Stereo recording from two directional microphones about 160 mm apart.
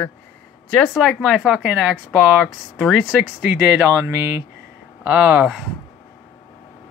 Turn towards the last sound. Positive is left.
turn(degrees=-15)  # may be behind; listen again after turning